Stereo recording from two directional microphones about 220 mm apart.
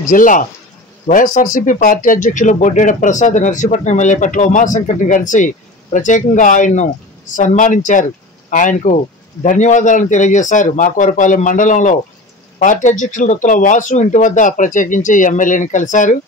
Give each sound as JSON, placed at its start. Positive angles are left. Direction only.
{"t": 0.1, "sound": "speech", "side_deg": 35}